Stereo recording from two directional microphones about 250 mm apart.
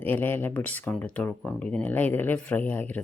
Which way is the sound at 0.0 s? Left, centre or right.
Centre.